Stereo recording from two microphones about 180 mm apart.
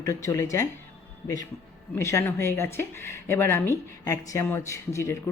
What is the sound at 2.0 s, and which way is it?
Speech, 15° left (ahead or behind).